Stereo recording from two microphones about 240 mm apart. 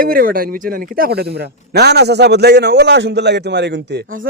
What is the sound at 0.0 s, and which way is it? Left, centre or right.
A man's voice, right.